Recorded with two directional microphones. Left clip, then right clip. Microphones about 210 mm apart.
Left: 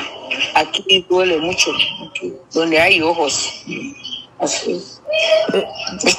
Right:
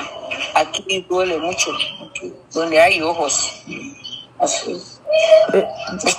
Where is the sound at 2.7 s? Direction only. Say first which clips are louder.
Even; 20° left (ahead or behind).